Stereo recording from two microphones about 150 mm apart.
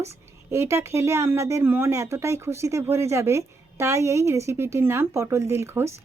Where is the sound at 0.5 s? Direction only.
20° right (ahead or behind).